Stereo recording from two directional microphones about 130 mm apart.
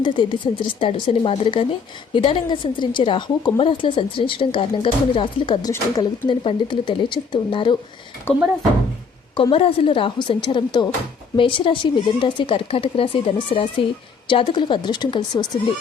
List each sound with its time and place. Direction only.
0.0 s a woman's voice: 40° left (ahead or behind)
9.3 s a woman's voice: 45° left (ahead or behind)